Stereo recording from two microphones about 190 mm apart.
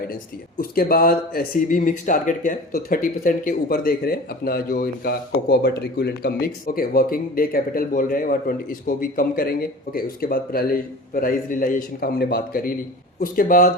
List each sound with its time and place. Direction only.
0.6 s speech: 50° left (ahead or behind)